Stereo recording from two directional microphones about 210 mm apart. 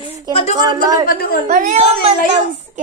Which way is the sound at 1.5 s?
40° right (ahead or behind).